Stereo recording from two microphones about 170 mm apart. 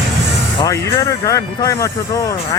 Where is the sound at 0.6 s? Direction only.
20° left (ahead or behind).